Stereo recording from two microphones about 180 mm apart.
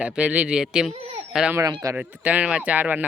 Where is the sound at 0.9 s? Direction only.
35° right (ahead or behind).